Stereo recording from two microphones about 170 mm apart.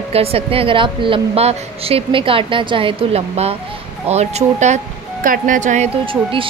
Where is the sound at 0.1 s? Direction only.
35° right (ahead or behind).